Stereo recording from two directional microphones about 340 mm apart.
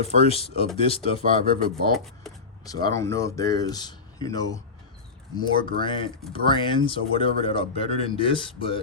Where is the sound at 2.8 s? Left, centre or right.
Centre.